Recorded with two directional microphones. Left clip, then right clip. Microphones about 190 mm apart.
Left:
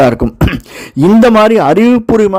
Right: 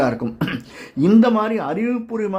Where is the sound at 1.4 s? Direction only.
55° left (ahead or behind).